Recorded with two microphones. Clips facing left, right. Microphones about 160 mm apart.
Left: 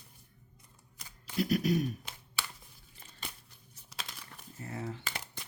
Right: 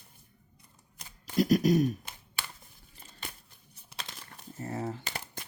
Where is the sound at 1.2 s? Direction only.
40° right (ahead or behind).